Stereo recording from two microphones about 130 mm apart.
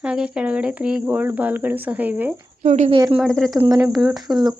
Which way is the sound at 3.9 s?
Centre (ahead or behind).